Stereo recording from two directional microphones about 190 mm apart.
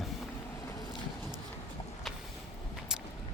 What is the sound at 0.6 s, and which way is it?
Vehicle, 20° left (ahead or behind).